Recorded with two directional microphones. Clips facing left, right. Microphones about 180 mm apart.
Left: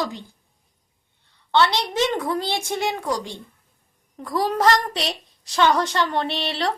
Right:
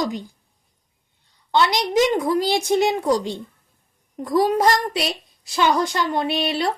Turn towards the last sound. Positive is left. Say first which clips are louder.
# right 3 dB
turn(degrees=-10)  # may be behind; listen again after turning